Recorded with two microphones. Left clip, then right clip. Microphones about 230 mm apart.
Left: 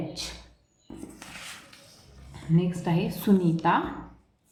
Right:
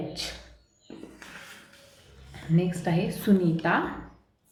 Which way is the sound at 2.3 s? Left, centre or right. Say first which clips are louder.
Even; centre.